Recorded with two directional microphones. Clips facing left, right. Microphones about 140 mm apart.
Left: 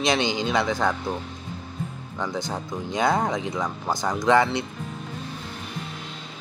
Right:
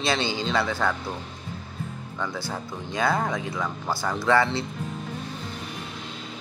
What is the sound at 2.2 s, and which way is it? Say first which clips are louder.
A man's voice: left 3 dB; 20° left (ahead or behind).